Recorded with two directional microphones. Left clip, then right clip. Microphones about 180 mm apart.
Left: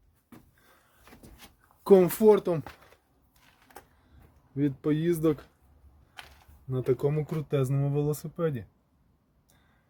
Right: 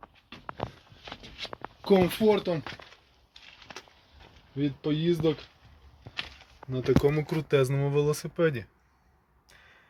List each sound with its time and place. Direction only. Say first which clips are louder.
1.9 s speech: left 4 dB; 15° left (ahead or behind)
4.5 s speech: left 2 dB; 40° left (ahead or behind)
6.7 s speech: right 3 dB; centre (ahead or behind)